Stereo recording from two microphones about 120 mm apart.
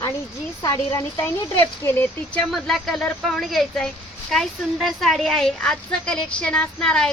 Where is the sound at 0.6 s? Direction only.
30° left (ahead or behind); by 2.5 s 15° left (ahead or behind).